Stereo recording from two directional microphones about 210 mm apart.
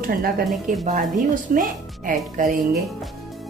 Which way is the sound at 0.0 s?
45° right (ahead or behind).